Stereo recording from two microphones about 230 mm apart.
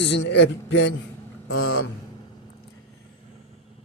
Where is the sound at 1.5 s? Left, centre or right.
Left.